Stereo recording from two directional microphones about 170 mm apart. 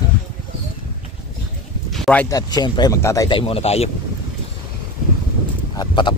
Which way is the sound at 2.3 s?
25° left (ahead or behind).